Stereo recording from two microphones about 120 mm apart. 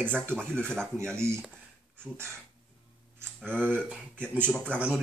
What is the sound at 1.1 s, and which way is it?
Speech, 20° right (ahead or behind).